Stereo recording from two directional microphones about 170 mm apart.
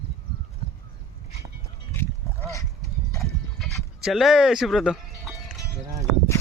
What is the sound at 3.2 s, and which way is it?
Horse, centre (ahead or behind).